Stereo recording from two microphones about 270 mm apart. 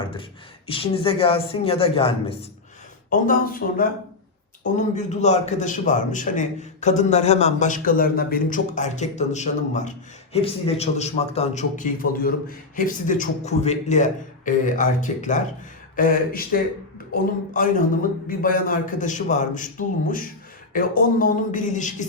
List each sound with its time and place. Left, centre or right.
0.7 s a man's voice: left
3.1 s a man's voice: left